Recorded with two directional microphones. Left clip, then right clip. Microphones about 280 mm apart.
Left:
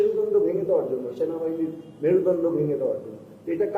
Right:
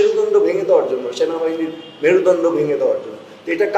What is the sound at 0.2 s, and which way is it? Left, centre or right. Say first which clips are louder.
A man's voice: right 7 dB; centre.